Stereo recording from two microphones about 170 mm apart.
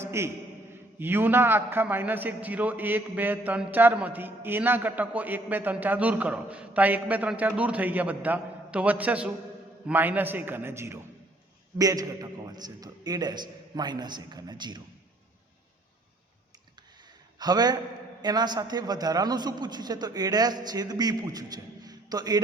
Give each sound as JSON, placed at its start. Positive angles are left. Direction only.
{"t": 0.0, "sound": "a sound", "side_deg": -15}
{"t": 0.9, "sound": "a man's voice", "side_deg": -10}
{"t": 17.4, "sound": "a man's voice", "side_deg": -25}